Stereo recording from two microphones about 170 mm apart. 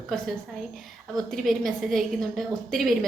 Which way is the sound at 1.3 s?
Centre (ahead or behind).